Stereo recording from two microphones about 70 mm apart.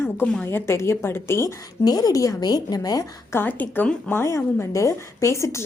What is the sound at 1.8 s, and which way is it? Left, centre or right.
A woman's voice, left.